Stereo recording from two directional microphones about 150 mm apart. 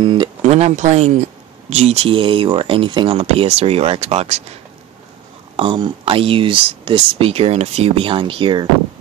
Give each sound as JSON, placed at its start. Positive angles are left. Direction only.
{"t": 0.0, "sound": "a sound", "side_deg": -30}
{"t": 0.4, "sound": "speech", "side_deg": -45}
{"t": 5.6, "sound": "speech", "side_deg": -30}